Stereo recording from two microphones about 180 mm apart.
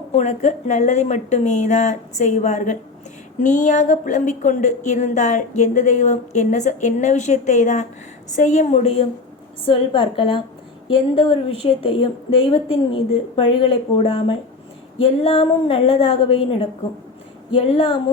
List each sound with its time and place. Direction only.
0.1 s a woman's voice: 40° left (ahead or behind)